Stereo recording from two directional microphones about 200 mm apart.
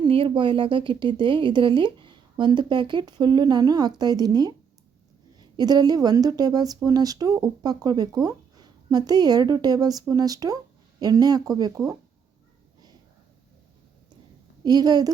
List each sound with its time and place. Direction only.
0.0 s a woman's voice: 25° right (ahead or behind)
14.6 s a woman's voice: 20° right (ahead or behind)